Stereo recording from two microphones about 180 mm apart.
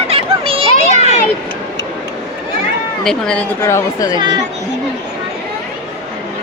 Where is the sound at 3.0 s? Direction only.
5° left (ahead or behind).